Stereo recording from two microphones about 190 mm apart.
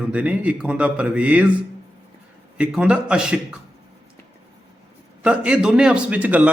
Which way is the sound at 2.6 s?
5° right (ahead or behind).